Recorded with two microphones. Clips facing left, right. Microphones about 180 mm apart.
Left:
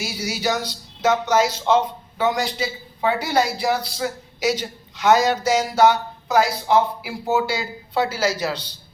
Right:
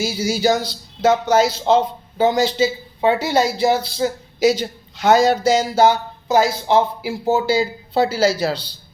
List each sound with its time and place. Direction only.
0.0 s speech: 25° right (ahead or behind)